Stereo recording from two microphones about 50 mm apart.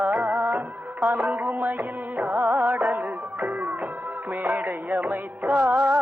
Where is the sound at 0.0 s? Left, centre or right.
Right.